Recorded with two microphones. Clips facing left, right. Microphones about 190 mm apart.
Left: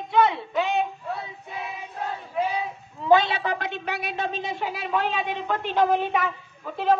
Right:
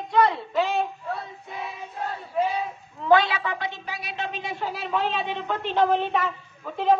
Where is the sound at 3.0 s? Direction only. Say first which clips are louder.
Even; 20° left (ahead or behind).